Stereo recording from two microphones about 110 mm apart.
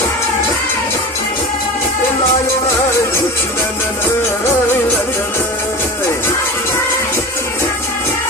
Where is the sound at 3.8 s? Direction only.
20° left (ahead or behind).